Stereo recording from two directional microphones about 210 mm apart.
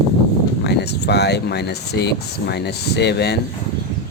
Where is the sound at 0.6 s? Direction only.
50° left (ahead or behind).